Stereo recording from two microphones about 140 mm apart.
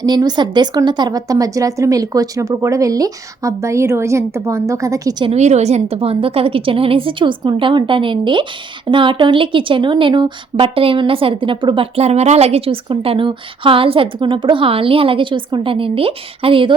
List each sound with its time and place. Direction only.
0.0 s a woman's voice: 30° right (ahead or behind)
5.2 s a woman's voice: 50° right (ahead or behind)